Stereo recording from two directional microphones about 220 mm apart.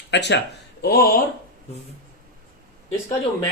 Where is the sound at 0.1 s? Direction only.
50° left (ahead or behind).